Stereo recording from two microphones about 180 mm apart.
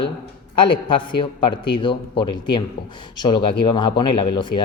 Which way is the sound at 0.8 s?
25° left (ahead or behind).